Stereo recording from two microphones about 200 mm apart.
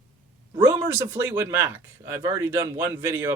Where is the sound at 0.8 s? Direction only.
10° right (ahead or behind).